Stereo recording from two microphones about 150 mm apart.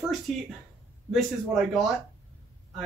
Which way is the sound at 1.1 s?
Centre (ahead or behind).